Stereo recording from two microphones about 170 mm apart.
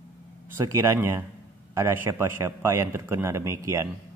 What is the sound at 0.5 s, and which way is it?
A man's voice, 15° right (ahead or behind).